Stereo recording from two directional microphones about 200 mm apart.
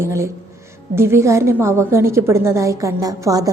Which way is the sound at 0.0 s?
15° right (ahead or behind).